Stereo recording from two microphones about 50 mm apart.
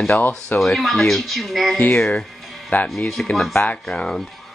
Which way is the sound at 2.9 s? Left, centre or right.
Centre.